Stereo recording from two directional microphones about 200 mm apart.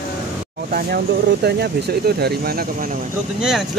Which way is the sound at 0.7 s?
50° right (ahead or behind).